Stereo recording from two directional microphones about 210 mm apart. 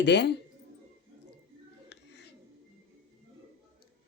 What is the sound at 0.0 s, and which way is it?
Speech, 55° left (ahead or behind).